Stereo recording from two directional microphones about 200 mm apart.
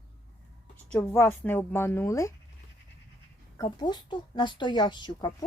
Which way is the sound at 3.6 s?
20° left (ahead or behind).